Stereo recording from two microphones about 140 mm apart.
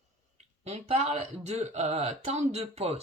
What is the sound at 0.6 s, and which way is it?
Speech, 50° right (ahead or behind).